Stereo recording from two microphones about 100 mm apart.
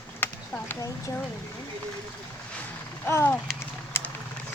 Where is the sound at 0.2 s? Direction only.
20° left (ahead or behind).